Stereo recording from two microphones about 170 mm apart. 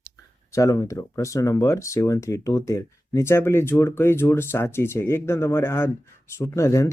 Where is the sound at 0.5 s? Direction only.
20° left (ahead or behind).